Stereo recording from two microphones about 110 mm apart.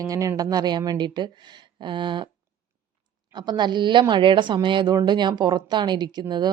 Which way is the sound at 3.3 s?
40° right (ahead or behind).